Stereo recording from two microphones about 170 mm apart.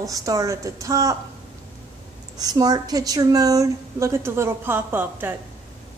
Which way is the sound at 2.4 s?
20° right (ahead or behind).